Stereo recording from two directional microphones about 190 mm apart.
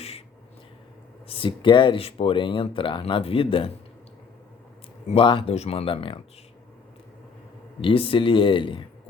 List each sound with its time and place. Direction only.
1.3 s speech: 30° left (ahead or behind)
5.0 s speech: 30° left (ahead or behind)
7.8 s speech: 30° left (ahead or behind)